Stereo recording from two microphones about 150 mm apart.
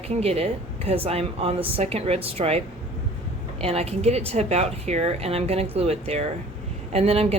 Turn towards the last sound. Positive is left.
turn(degrees=-40)  # may be behind; listen again after turning